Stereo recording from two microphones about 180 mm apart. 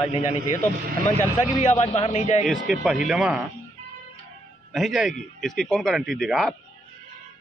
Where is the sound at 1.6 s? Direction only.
40° left (ahead or behind).